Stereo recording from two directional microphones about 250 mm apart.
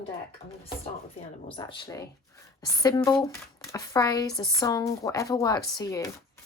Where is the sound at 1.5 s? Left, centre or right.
Centre.